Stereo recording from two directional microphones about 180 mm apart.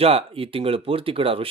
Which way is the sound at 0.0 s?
30° right (ahead or behind).